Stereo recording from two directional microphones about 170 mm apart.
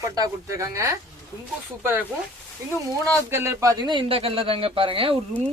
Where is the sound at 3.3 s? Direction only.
15° right (ahead or behind).